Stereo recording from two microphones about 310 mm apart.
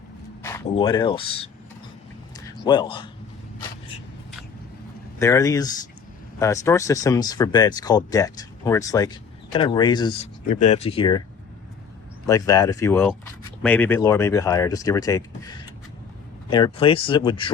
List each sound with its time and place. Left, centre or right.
0.4 s speech: centre
2.6 s speech: centre
5.2 s speech: centre
12.2 s speech: centre